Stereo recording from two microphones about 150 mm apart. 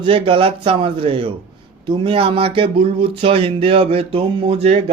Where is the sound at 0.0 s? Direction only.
35° right (ahead or behind).